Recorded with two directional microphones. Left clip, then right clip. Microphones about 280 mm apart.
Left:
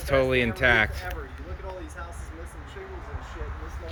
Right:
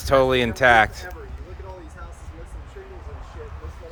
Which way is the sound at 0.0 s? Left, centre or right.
Centre.